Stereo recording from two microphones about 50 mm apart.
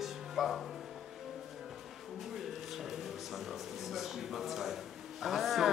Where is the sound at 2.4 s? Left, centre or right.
Centre.